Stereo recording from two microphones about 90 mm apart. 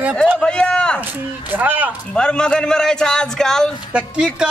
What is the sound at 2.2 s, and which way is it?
Speech, 10° left (ahead or behind).